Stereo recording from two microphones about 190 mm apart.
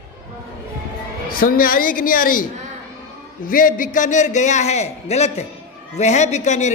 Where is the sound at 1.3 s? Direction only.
50° left (ahead or behind).